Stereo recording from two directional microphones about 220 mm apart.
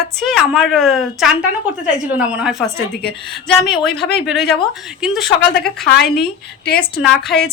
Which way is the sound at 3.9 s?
50° left (ahead or behind).